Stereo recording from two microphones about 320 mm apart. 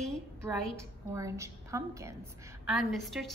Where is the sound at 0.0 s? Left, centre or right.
Centre.